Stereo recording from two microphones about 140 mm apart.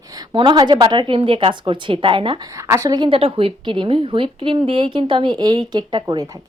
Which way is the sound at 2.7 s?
25° right (ahead or behind).